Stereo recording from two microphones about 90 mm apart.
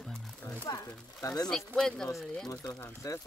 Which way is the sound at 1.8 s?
5° left (ahead or behind).